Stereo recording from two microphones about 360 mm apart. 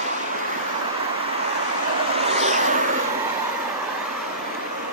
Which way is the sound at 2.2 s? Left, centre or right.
Centre.